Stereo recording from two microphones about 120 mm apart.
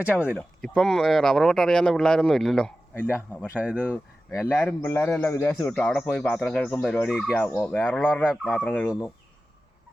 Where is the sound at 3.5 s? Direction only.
10° right (ahead or behind).